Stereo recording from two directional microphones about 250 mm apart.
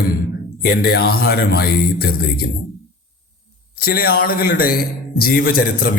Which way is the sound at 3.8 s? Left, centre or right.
Left.